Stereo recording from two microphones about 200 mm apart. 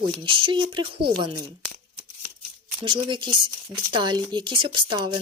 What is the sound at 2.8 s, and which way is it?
A woman's voice, 25° right (ahead or behind).